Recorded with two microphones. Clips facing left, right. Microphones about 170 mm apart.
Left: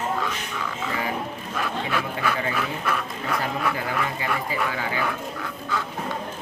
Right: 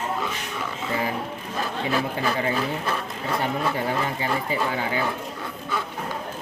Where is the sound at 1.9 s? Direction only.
35° right (ahead or behind).